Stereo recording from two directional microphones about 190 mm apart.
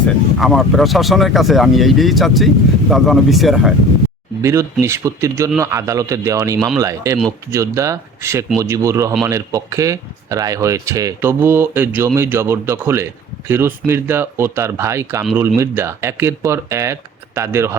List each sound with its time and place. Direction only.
0.3 s speech: centre (ahead or behind)
4.4 s speech: 15° right (ahead or behind)